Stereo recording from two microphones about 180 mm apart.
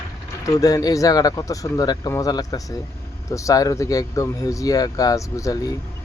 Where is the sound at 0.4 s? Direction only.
20° left (ahead or behind).